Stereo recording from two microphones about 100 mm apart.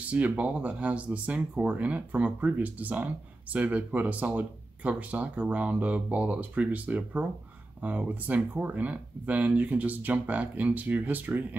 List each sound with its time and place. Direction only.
0.1 s speech: 15° right (ahead or behind)